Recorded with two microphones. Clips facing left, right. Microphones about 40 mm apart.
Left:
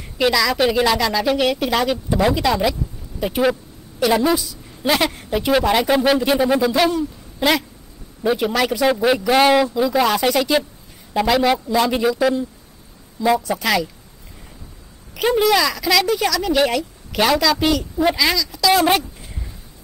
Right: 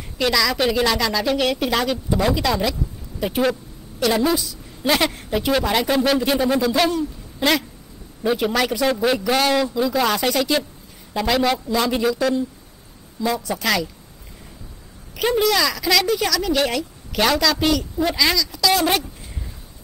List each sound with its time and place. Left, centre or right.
0.2 s a woman's voice: centre
9.8 s a woman's voice: centre
15.1 s a woman's voice: centre